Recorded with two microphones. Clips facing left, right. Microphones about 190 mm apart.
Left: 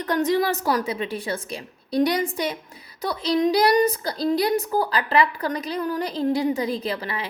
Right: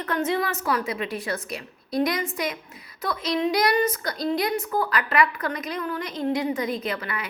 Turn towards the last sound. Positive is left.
turn(degrees=30)  # may be behind; listen again after turning